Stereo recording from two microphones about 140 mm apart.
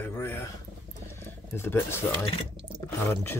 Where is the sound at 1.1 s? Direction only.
15° left (ahead or behind).